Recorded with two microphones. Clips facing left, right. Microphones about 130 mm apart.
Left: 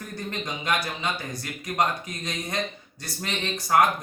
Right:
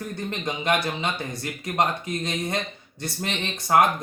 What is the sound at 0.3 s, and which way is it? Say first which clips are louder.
Speech: right 3 dB; 25° right (ahead or behind).